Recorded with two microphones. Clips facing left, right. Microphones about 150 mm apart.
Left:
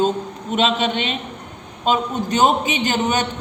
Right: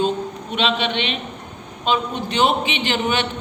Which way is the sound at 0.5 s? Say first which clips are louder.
Left 3 dB; 45° left (ahead or behind).